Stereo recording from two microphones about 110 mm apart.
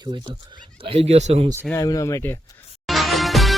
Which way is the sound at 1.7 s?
30° left (ahead or behind).